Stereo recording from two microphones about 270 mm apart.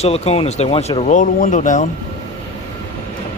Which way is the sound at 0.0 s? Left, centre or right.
Left.